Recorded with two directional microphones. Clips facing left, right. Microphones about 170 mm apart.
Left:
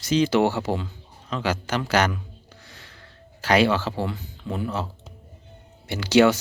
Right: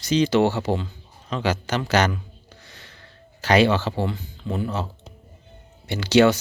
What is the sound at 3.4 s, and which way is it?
Speech, 5° left (ahead or behind).